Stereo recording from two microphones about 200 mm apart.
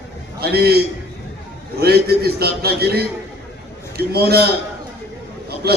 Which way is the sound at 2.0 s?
50° right (ahead or behind).